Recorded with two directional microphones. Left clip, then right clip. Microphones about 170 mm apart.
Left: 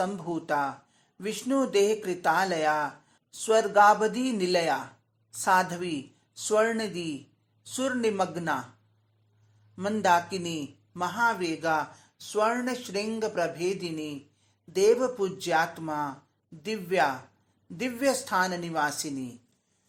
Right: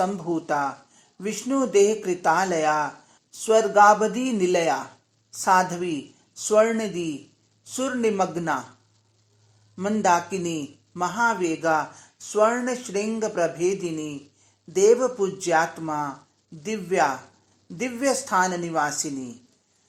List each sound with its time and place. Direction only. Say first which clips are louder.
0.0 s speech: right 5 dB; 20° left (ahead or behind)
9.7 s speech: right 3 dB; 20° left (ahead or behind)